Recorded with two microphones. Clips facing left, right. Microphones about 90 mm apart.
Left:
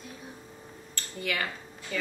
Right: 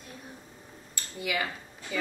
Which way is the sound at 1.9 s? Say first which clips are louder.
Right 1 dB; 10° right (ahead or behind).